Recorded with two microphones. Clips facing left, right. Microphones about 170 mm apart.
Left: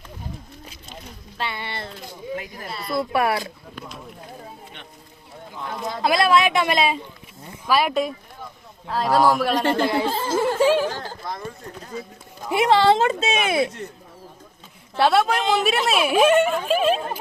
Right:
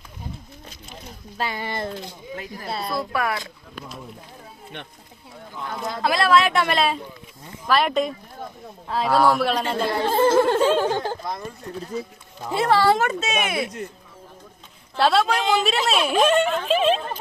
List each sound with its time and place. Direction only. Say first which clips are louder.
1.4 s speech: right 3 dB; 40° right (ahead or behind)
2.4 s a woman's voice: right 4 dB; 20° left (ahead or behind)
5.8 s speech: left 2 dB; 15° left (ahead or behind)
6.7 s a woman's voice: left 1 dB; centre (ahead or behind)
10.2 s a sound: right 8 dB; 60° right (ahead or behind)
12.5 s a woman's voice: left 2 dB; 20° left (ahead or behind)
14.9 s a woman's voice: left 1 dB; centre (ahead or behind)